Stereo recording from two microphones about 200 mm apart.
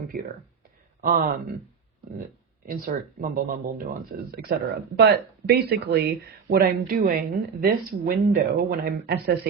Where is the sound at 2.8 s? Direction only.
45° right (ahead or behind).